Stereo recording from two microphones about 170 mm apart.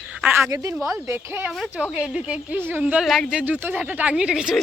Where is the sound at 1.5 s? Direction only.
Centre (ahead or behind).